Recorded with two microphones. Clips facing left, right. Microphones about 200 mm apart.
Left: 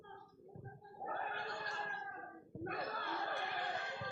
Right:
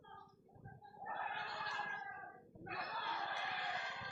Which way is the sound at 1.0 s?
50° left (ahead or behind).